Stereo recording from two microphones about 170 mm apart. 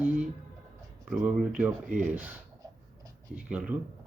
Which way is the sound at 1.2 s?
5° right (ahead or behind).